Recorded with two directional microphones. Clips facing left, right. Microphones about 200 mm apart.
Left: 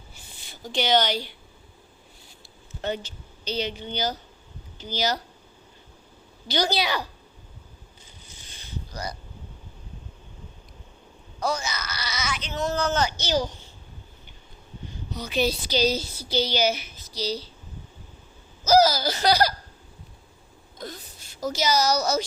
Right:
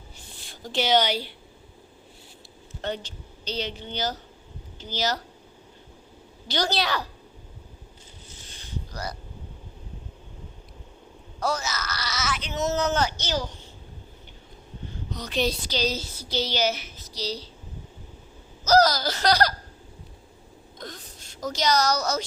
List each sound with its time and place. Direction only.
0.3 s speech: centre (ahead or behind)
2.8 s a woman's voice: 5° left (ahead or behind)
6.5 s a woman's voice: centre (ahead or behind)
11.6 s baby cry: centre (ahead or behind)
12.5 s speech: 20° right (ahead or behind)
13.1 s a child's voice: 15° left (ahead or behind)
15.1 s a woman's voice: 5° left (ahead or behind)
16.3 s a woman's voice: centre (ahead or behind)
18.6 s a woman's voice: 5° left (ahead or behind)
20.7 s a woman's voice: 5° left (ahead or behind)